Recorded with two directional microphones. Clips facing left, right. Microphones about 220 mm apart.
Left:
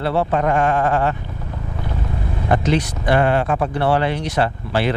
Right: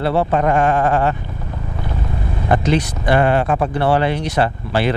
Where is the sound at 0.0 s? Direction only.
15° right (ahead or behind).